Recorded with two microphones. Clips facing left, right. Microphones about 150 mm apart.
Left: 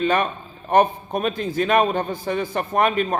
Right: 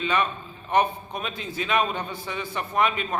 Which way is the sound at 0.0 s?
45° left (ahead or behind).